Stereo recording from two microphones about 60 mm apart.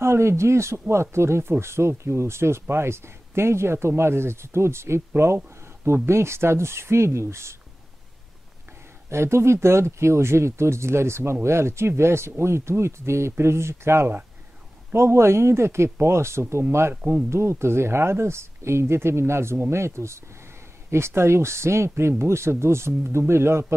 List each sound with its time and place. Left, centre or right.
0.0 s speech: right
9.1 s speech: right
16.9 s speech: right
17.3 s speech: right